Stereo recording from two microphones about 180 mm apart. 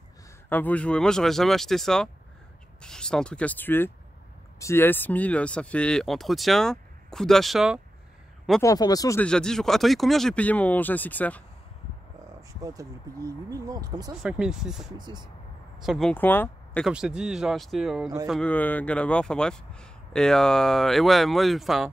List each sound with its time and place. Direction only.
0.5 s speech: 10° left (ahead or behind)
8.6 s speech: 20° left (ahead or behind)
9.2 s speech: 5° left (ahead or behind)
12.4 s a sound: 20° right (ahead or behind)
13.5 s speech: 20° right (ahead or behind)
14.2 s speech: 5° right (ahead or behind)
15.0 s speech: 25° right (ahead or behind)
15.8 s speech: centre (ahead or behind)
16.1 s speech: 10° left (ahead or behind)
16.8 s speech: 5° right (ahead or behind)